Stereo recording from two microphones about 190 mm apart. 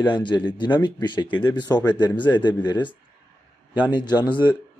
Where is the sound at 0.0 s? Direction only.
25° left (ahead or behind).